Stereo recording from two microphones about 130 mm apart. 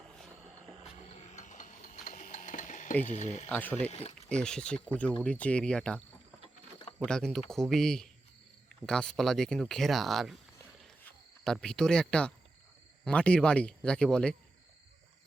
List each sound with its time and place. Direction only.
1.0 s a sound: 60° left (ahead or behind); by 2.9 s 75° left (ahead or behind)
3.0 s speech: 65° left (ahead or behind)
3.5 s speech: 15° left (ahead or behind)
7.0 s speech: 5° left (ahead or behind)